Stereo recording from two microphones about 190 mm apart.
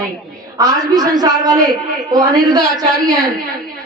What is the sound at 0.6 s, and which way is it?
A woman's voice, 20° right (ahead or behind).